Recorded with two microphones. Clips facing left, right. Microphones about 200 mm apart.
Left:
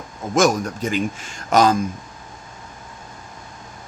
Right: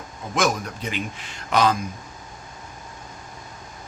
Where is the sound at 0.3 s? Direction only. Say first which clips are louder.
Left 6 dB; 45° left (ahead or behind).